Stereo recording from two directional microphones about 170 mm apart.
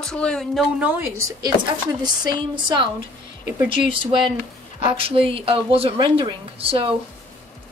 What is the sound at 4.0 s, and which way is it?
A woman's voice, 30° right (ahead or behind).